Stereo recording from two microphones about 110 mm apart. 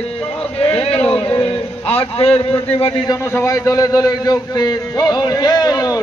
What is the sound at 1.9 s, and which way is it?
Speech, 65° left (ahead or behind).